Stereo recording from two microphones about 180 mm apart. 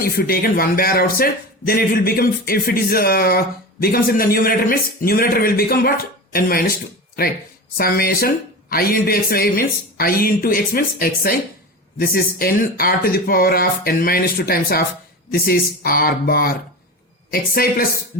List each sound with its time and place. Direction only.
0.0 s speech: 55° left (ahead or behind)
7.8 s speech: 55° left (ahead or behind)